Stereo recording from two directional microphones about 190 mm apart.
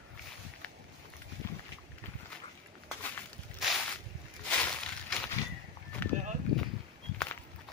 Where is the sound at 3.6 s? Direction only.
Centre (ahead or behind).